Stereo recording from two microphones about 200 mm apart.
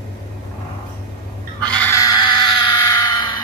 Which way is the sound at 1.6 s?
5° left (ahead or behind).